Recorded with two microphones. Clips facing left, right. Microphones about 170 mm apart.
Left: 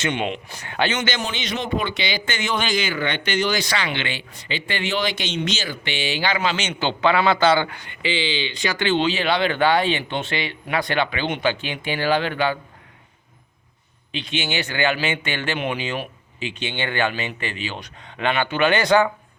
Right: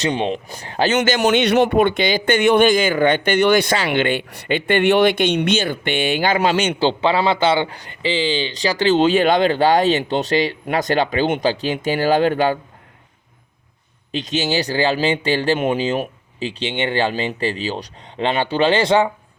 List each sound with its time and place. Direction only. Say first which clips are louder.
0.0 s a man's voice: right 4 dB; 35° right (ahead or behind)
0.9 s speech: right 8 dB; 45° right (ahead or behind)
1.2 s speech: right 13 dB; 65° right (ahead or behind); by 6.7 s 50° right (ahead or behind)
6.7 s a man's voice: right 3 dB; 30° right (ahead or behind)
14.1 s a man's voice: right 6 dB; 40° right (ahead or behind); by 19.1 s 25° right (ahead or behind)